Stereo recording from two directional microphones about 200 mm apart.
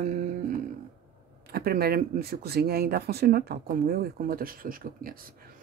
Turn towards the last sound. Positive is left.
turn(degrees=-45)  # may be behind; listen again after turning